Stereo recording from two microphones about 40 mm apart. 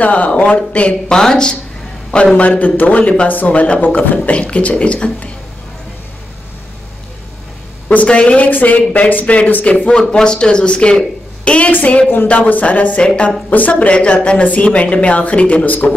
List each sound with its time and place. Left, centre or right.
0.0 s a woman's voice: left
0.3 s speech: left
1.1 s speech: centre
2.3 s a woman's voice: left
4.3 s a woman's voice: left
7.9 s a woman's voice: left
8.5 s a woman's voice: left
9.8 s a woman's voice: left
13.0 s speech: left
13.5 s a woman's voice: left